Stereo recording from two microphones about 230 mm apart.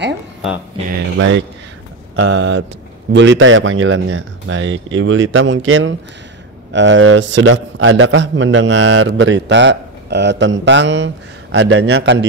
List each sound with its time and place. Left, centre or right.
0.9 s a man's voice: right